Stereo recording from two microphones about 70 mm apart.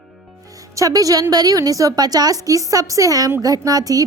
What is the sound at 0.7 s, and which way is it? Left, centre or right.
A woman's voice, right.